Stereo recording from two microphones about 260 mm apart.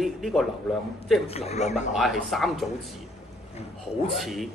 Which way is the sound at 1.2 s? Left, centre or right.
Left.